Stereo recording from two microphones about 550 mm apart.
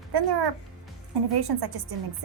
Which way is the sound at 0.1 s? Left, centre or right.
Right.